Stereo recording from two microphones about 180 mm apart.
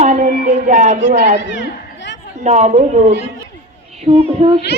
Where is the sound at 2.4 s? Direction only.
40° right (ahead or behind).